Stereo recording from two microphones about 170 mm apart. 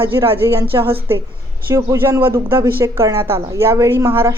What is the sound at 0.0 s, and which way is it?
A woman's voice, 15° right (ahead or behind).